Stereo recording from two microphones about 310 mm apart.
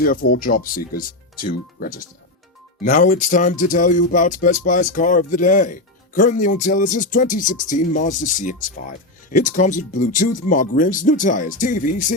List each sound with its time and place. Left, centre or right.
0.0 s speech: left